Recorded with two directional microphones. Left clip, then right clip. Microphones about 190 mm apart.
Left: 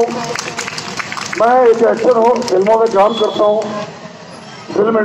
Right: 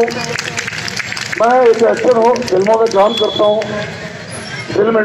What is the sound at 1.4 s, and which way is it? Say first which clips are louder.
A man's voice: even; 20° right (ahead or behind).